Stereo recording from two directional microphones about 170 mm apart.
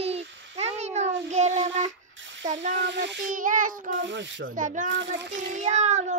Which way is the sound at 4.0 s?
90° right.